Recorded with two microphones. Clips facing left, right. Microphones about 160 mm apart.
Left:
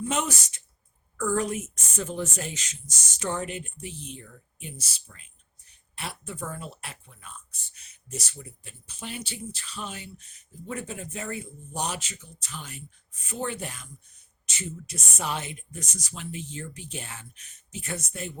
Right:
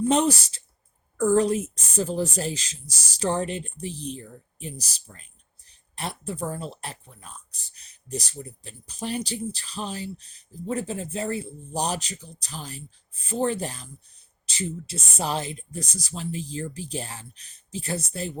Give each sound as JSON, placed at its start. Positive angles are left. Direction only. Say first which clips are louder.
{"t": 0.0, "sound": "speech", "louder": "right 8 dB", "side_deg": -35}